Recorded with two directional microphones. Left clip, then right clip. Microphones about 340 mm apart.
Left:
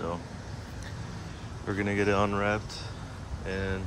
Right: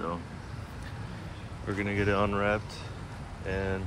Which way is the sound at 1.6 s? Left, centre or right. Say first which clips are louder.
Left 2 dB; centre.